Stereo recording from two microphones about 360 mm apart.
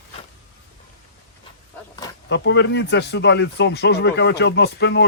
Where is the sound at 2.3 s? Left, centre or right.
Left.